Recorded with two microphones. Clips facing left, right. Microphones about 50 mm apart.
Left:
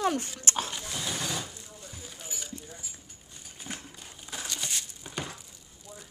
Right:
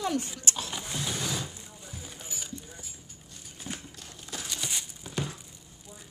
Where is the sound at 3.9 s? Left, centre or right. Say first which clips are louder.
Even; centre.